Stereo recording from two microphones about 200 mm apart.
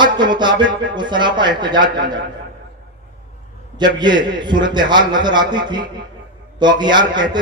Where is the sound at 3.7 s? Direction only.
20° right (ahead or behind).